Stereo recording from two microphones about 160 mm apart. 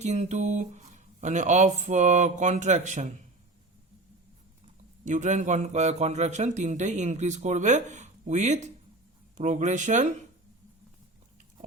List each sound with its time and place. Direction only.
0.0 s a man's voice: 45° right (ahead or behind)
5.0 s a man's voice: 50° right (ahead or behind)